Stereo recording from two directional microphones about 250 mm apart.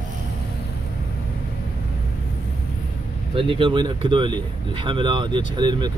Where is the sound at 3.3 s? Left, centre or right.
Right.